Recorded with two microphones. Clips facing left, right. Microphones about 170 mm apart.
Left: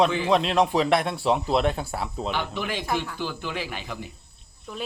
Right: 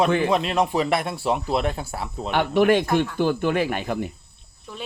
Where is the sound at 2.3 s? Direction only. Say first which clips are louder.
Right 11 dB; 60° right (ahead or behind).